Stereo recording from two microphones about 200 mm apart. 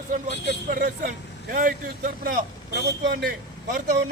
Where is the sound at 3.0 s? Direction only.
55° right (ahead or behind).